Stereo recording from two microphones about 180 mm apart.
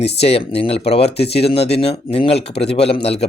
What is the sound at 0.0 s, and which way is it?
Speech, 35° left (ahead or behind).